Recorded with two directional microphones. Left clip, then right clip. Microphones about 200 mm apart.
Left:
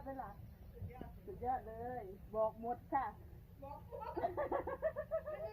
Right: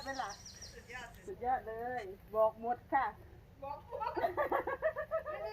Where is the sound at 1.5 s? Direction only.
20° right (ahead or behind).